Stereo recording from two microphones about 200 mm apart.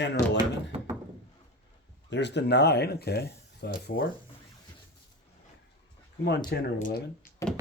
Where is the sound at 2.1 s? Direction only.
60° left (ahead or behind).